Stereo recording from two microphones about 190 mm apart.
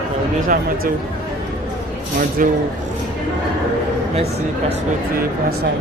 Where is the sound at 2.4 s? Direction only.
45° right (ahead or behind).